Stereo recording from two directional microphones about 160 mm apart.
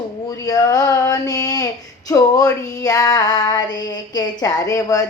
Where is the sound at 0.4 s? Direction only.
20° left (ahead or behind).